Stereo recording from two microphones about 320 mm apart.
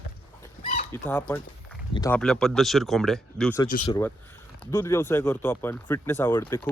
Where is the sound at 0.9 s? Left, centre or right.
Centre.